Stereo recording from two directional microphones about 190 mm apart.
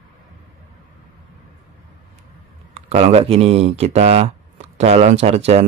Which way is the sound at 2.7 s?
35° right (ahead or behind).